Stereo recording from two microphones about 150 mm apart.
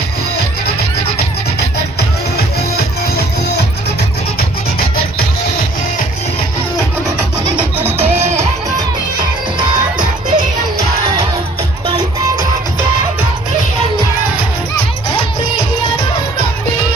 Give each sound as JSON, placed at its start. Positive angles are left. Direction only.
{"t": 9.6, "sound": "music", "side_deg": -30}